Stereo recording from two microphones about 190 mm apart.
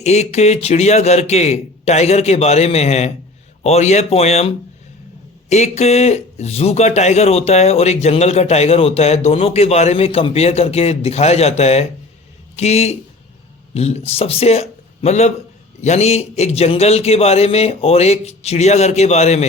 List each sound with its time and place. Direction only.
0.0 s a man's voice: 35° left (ahead or behind)